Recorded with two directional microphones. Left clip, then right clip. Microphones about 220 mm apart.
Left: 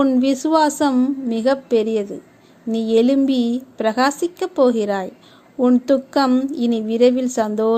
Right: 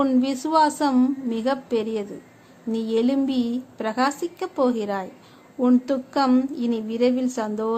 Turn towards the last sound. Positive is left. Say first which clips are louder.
# left 7 dB
turn(degrees=20)  # may be behind; listen again after turning